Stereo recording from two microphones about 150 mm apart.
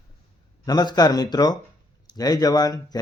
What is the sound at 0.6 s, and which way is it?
Speech, 25° left (ahead or behind).